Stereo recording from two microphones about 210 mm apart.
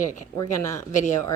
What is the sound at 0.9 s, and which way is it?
Speech, 35° left (ahead or behind).